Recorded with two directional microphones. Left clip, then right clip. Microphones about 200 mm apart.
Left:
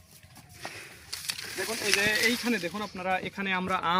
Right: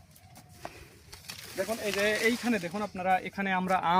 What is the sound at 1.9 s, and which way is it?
Speech, 45° right (ahead or behind).